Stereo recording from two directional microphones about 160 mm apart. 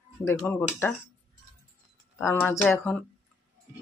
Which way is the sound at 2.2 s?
15° left (ahead or behind).